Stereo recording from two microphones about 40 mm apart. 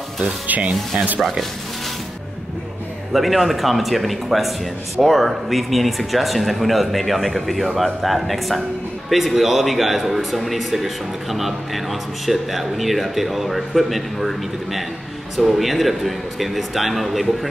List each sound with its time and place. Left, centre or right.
0.2 s speech: right
3.1 s speech: centre